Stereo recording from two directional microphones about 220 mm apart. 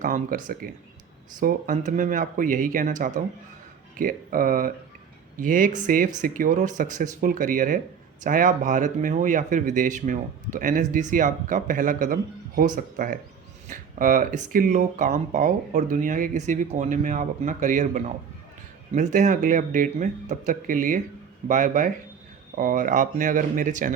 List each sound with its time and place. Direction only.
0.0 s a man's voice: 40° right (ahead or behind)